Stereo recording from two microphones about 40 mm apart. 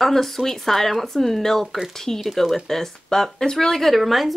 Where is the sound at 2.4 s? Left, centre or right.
Centre.